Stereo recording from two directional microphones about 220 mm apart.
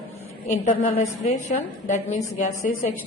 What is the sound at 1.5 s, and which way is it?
A woman's voice, 35° left (ahead or behind).